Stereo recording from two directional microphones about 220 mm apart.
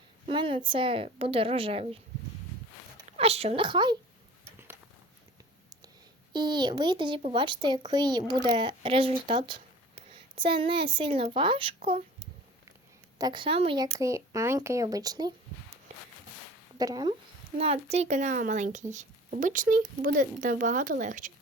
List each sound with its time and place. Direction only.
0.3 s a woman's voice: 25° right (ahead or behind)
3.1 s speech: 25° right (ahead or behind)
6.3 s a woman's voice: 20° right (ahead or behind)
13.1 s speech: 20° right (ahead or behind)
13.9 s speech: 15° right (ahead or behind)
16.7 s speech: 20° right (ahead or behind)
17.6 s speech: 30° right (ahead or behind)